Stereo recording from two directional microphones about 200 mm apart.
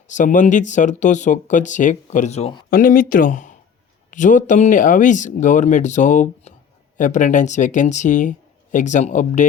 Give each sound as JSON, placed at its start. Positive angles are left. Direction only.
{"t": 0.1, "sound": "speech", "side_deg": 40}
{"t": 2.6, "sound": "speech", "side_deg": 45}